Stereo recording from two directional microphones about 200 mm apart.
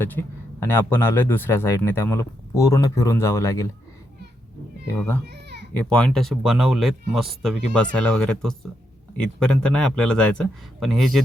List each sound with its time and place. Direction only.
0.0 s speech: 10° left (ahead or behind)
4.9 s speech: 10° left (ahead or behind)
5.3 s a sound: 55° right (ahead or behind)
5.7 s a man's voice: 5° left (ahead or behind)